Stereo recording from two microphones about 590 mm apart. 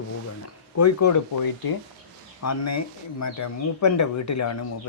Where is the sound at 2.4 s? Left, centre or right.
Left.